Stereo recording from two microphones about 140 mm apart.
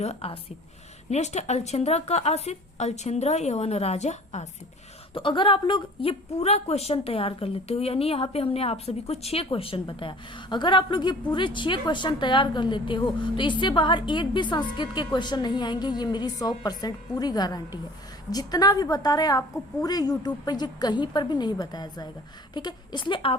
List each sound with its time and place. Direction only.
0.0 s a woman's voice: 45° left (ahead or behind)
5.1 s a woman's voice: 35° left (ahead or behind)